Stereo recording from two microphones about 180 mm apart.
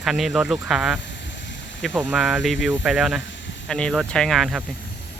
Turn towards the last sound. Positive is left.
turn(degrees=0)  # may be behind; listen again after turning